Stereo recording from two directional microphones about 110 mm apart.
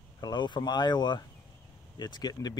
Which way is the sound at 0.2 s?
45° left (ahead or behind).